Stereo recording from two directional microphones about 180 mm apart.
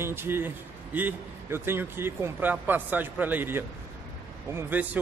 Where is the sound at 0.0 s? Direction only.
10° right (ahead or behind).